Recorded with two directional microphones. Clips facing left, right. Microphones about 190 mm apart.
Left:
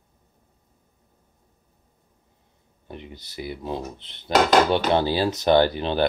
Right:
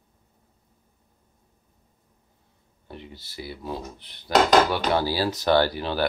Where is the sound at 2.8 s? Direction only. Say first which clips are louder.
Left 2 dB; 20° left (ahead or behind).